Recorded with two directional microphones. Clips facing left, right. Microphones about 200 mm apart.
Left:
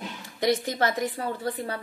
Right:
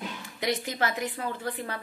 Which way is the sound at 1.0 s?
35° left (ahead or behind).